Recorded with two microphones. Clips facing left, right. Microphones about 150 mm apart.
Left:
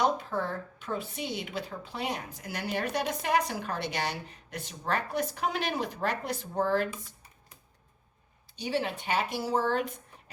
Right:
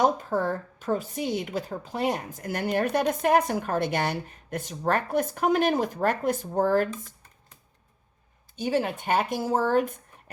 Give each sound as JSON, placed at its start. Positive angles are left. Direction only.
{"t": 0.0, "sound": "speech", "side_deg": -45}
{"t": 8.5, "sound": "speech", "side_deg": -45}